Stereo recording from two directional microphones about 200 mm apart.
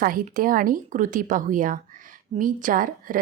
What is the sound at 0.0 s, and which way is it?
A woman's voice, 45° right (ahead or behind).